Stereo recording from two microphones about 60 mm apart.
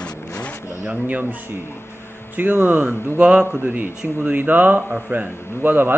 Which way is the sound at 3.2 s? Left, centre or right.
Centre.